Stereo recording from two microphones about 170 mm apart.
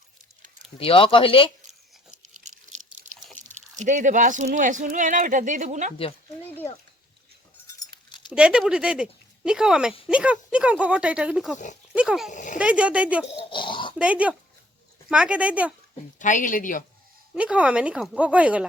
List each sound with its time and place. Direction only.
0.8 s speech: 35° left (ahead or behind)
2.5 s a sound: 45° right (ahead or behind)
3.3 s speech: 45° right (ahead or behind)
6.4 s a child's voice: 10° left (ahead or behind)
7.8 s keys jangling: 25° left (ahead or behind)
8.3 s speech: 5° right (ahead or behind)
11.5 s speech: 45° left (ahead or behind)
11.9 s speech: 5° right (ahead or behind)
12.3 s speech: 45° left (ahead or behind)
12.5 s speech: 5° right (ahead or behind)
13.5 s pig: 30° left (ahead or behind)
13.9 s speech: 10° right (ahead or behind)
16.1 s speech: 50° left (ahead or behind)
17.3 s speech: 5° right (ahead or behind)